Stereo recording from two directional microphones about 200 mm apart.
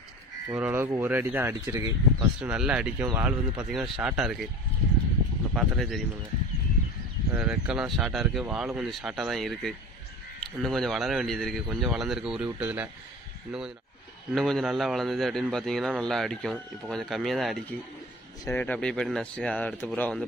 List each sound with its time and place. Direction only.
0.5 s speech: 10° right (ahead or behind)
2.5 s speech: 5° right (ahead or behind)
5.5 s speech: centre (ahead or behind)
7.3 s speech: 5° right (ahead or behind)